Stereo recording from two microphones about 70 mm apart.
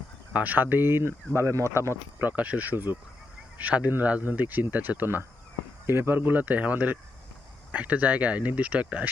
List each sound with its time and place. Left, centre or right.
0.3 s speech: right
1.4 s speech: right
2.2 s speech: right